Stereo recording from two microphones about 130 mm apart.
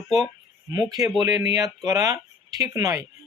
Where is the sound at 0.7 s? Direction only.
30° right (ahead or behind).